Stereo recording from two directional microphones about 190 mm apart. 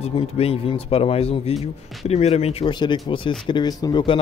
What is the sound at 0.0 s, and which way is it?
Speech, 30° left (ahead or behind).